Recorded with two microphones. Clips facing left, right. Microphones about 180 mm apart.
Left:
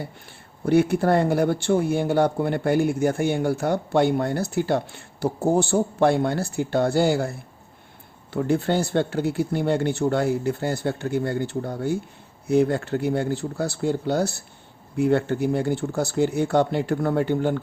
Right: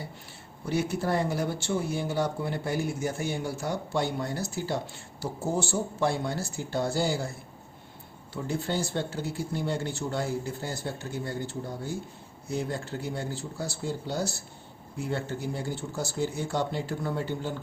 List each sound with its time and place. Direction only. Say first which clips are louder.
0.6 s speech: left 10 dB; 55° left (ahead or behind)